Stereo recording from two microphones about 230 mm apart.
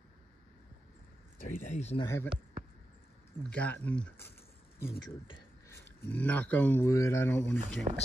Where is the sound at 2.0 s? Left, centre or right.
Centre.